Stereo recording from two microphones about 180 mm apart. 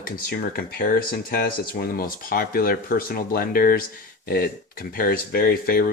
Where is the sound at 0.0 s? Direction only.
55° left (ahead or behind).